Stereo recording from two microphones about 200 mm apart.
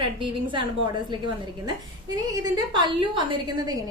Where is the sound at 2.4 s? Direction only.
20° right (ahead or behind).